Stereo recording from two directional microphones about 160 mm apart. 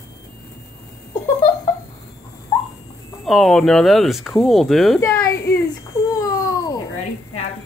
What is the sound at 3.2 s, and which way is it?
Speech, centre (ahead or behind).